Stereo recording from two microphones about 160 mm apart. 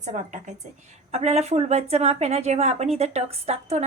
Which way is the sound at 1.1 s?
40° right (ahead or behind).